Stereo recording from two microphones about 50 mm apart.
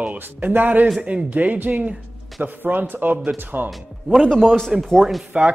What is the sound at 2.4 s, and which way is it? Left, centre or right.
Speech, right.